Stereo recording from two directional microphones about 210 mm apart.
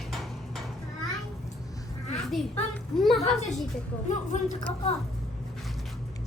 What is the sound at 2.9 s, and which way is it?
Speech, centre (ahead or behind).